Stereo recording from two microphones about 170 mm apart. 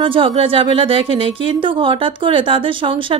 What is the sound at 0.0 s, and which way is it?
A woman's voice, 30° right (ahead or behind).